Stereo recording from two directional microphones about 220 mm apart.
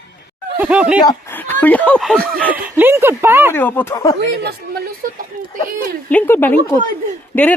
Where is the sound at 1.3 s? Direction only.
10° left (ahead or behind).